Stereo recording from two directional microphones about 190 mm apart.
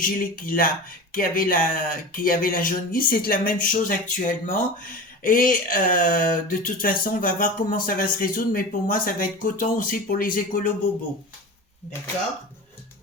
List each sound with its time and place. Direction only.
0.0 s speech: 45° left (ahead or behind)